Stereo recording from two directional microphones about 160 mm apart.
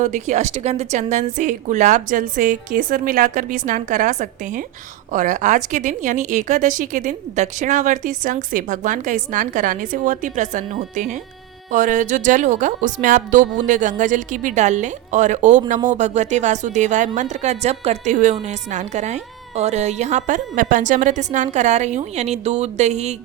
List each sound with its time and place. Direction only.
0.0 s a woman's voice: 50° right (ahead or behind)